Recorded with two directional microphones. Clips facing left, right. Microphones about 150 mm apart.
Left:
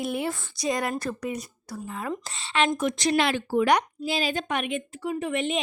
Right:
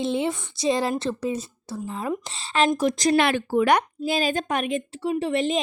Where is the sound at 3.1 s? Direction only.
55° right (ahead or behind); by 5.6 s 35° right (ahead or behind).